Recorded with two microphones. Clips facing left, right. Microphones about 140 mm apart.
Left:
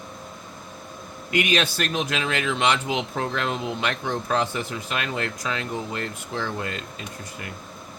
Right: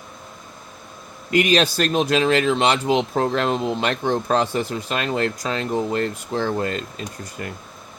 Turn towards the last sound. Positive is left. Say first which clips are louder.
# right 4 dB
turn(degrees=-40)  # may be behind; listen again after turning